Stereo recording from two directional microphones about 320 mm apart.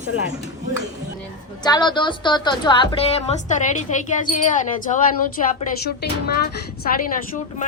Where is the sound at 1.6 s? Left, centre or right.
Centre.